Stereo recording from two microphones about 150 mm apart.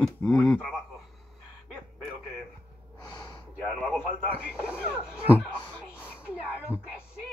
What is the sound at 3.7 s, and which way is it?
Speech, centre (ahead or behind).